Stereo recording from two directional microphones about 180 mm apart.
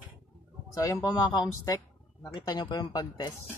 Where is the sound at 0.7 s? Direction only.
20° left (ahead or behind).